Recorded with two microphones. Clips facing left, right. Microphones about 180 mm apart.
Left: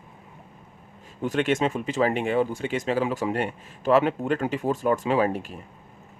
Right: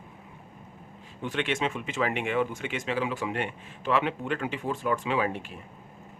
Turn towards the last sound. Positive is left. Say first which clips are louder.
# left 5 dB
turn(degrees=40)  # may be behind; listen again after turning